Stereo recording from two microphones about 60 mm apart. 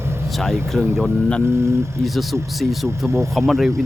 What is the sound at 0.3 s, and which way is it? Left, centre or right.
Speech, centre.